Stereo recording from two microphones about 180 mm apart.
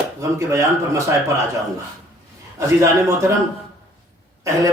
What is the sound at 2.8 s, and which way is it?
Speech, 15° right (ahead or behind).